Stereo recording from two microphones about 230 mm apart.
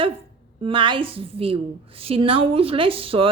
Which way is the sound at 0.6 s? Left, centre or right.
Right.